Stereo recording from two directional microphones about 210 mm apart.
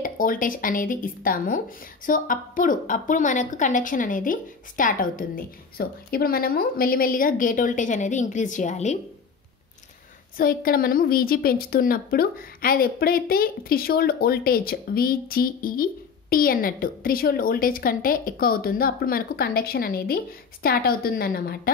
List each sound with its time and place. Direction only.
0.0 s a woman's voice: 40° left (ahead or behind)
10.3 s a woman's voice: 45° left (ahead or behind)